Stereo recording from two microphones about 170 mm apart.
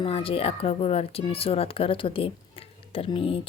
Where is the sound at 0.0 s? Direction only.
30° left (ahead or behind).